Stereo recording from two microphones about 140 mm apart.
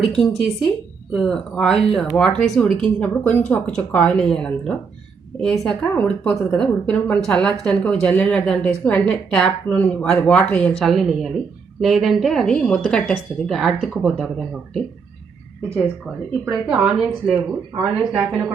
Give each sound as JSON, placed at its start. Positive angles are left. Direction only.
{"t": 0.2, "sound": "a woman's voice", "side_deg": 0}
{"t": 16.5, "sound": "a woman's voice", "side_deg": -5}